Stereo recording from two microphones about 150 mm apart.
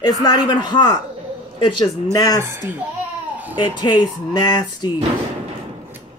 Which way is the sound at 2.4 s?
15° right (ahead or behind).